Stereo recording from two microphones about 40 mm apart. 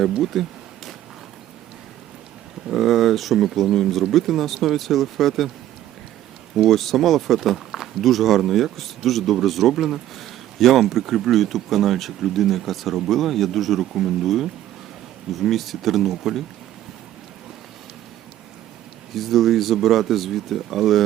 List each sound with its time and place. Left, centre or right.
0.1 s speech: centre
2.6 s speech: centre
6.6 s speech: centre
19.1 s speech: centre